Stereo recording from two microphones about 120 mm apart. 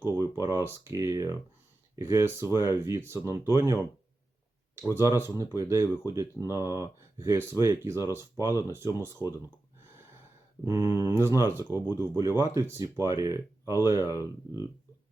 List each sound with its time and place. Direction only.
0.2 s speech: 25° right (ahead or behind)
10.6 s speech: 15° right (ahead or behind)